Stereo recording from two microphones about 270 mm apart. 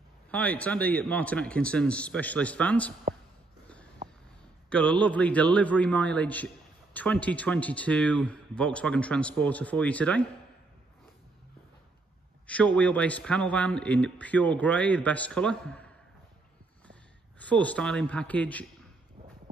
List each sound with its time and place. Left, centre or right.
0.3 s a man's voice: centre
4.0 s a sound: right
4.6 s a man's voice: centre
12.4 s a man's voice: centre
17.4 s a man's voice: centre